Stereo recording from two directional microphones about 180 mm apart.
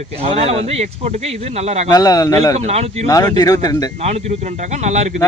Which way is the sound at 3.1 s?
20° left (ahead or behind).